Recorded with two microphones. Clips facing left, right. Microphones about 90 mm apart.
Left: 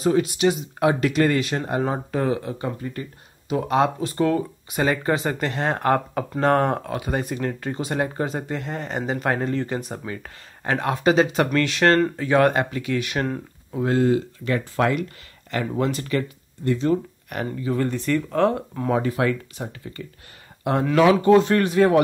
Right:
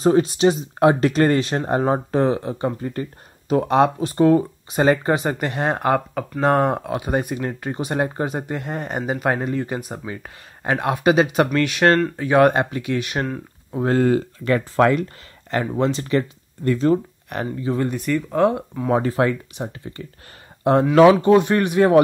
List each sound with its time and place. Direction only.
0.0 s speech: 35° right (ahead or behind)
2.8 s speech: 40° right (ahead or behind); by 13.3 s 20° right (ahead or behind)
13.7 s speech: 45° right (ahead or behind)
15.8 s speech: 25° right (ahead or behind)
16.6 s speech: 45° right (ahead or behind)
17.6 s speech: 20° right (ahead or behind)
18.9 s speech: 35° right (ahead or behind)
19.5 s speech: 20° right (ahead or behind)
20.9 s speech: 25° right (ahead or behind)